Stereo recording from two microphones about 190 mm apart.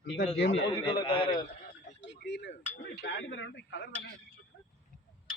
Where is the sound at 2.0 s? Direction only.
65° left (ahead or behind).